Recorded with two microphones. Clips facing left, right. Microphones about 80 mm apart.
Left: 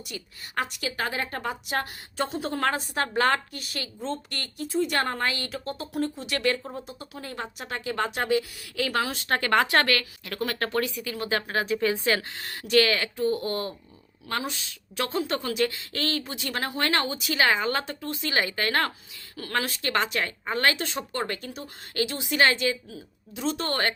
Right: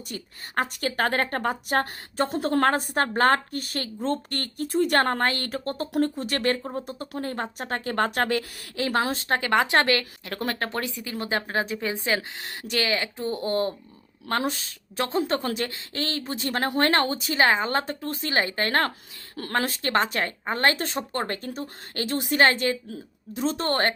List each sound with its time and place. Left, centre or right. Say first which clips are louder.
0.1 s a woman's voice: right 3 dB; right
8.7 s a woman's voice: right 2 dB; right
9.4 s a woman's voice: even; centre; by 23.9 s right